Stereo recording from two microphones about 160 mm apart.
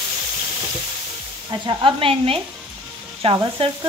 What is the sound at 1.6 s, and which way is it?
Speech, 35° right (ahead or behind).